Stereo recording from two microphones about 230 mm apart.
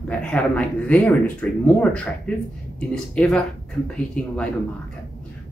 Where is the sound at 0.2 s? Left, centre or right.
Centre.